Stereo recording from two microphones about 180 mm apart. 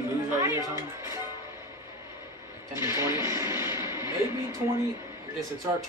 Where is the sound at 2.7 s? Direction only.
15° right (ahead or behind).